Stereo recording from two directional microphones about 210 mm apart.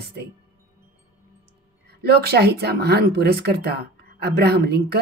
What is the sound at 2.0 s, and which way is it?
A woman's voice, 50° right (ahead or behind).